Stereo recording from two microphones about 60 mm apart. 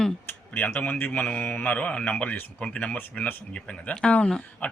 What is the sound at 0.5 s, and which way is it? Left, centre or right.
A man's voice, left.